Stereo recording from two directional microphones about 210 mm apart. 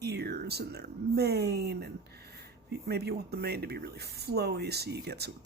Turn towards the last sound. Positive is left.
turn(degrees=-50)  # may be behind; listen again after turning